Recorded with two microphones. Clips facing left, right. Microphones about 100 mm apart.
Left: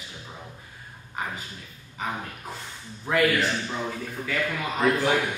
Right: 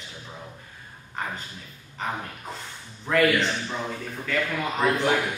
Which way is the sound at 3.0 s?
5° left (ahead or behind).